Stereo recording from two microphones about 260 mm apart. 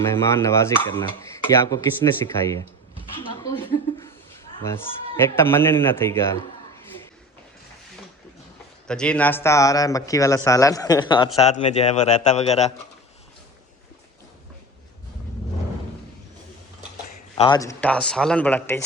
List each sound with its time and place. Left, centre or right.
0.0 s speech: centre
3.2 s a sound: centre
4.0 s a man's voice: centre
8.9 s speech: centre; by 12.7 s left
17.3 s speech: centre